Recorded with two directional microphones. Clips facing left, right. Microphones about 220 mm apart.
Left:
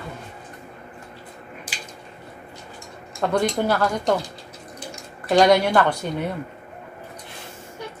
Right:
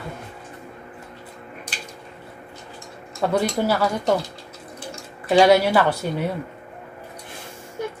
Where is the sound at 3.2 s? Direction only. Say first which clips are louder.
Even; 5° right (ahead or behind).